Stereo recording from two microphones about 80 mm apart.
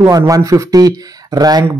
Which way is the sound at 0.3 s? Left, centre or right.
Right.